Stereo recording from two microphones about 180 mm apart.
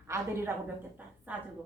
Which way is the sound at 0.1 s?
15° right (ahead or behind).